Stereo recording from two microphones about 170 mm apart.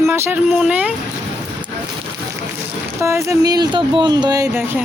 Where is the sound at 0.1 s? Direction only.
10° right (ahead or behind).